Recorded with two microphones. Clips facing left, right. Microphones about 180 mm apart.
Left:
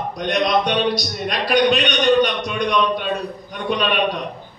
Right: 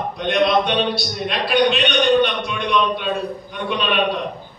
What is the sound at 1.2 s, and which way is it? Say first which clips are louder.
A man's voice: left 1 dB; 40° left (ahead or behind).